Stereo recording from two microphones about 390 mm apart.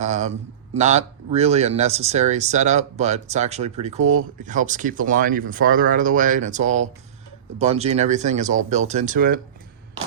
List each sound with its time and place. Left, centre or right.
0.0 s speech: centre